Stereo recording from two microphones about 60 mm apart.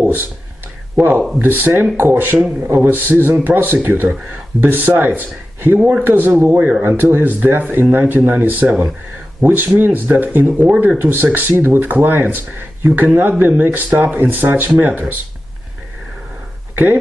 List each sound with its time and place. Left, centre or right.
1.4 s speech: right
16.7 s speech: right